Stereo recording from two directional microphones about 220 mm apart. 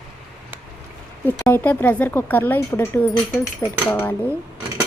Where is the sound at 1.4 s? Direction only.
10° left (ahead or behind).